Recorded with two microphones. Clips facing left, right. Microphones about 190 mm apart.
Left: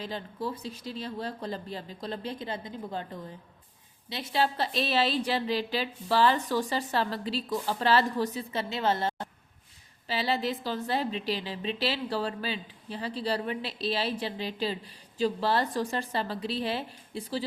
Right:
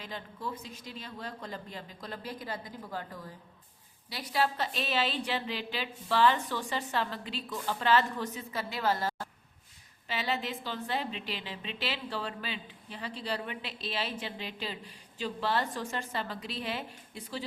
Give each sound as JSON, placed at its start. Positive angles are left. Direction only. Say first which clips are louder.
{"t": 0.0, "sound": "a woman's voice", "louder": "left 5 dB", "side_deg": 30}